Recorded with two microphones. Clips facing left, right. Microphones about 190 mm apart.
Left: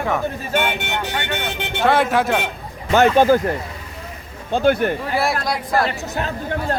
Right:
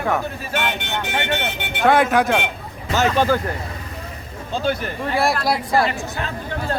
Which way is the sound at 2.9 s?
55° left (ahead or behind).